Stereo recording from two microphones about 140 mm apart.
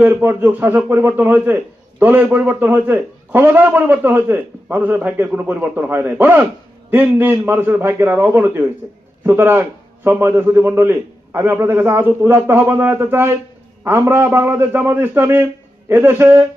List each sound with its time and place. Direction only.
0.0 s a man's voice: 15° right (ahead or behind)